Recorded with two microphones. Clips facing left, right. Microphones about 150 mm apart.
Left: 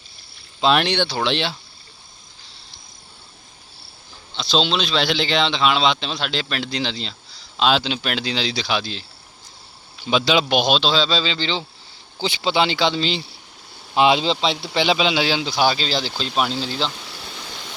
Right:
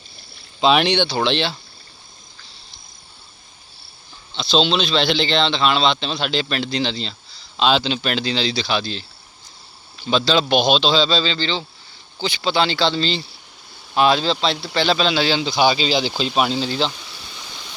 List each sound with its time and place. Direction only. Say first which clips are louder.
0.6 s speech: right 2 dB; centre (ahead or behind)
4.5 s speech: right 2 dB; 5° left (ahead or behind)
10.1 s speech: right 1 dB; 10° left (ahead or behind)